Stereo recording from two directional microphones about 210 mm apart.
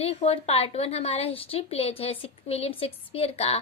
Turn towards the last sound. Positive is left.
turn(degrees=30)  # may be behind; listen again after turning